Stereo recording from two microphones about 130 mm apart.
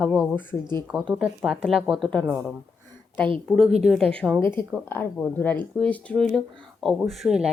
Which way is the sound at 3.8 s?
5° left (ahead or behind).